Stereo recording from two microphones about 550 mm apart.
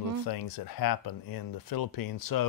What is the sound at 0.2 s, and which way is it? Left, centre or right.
Speech, left.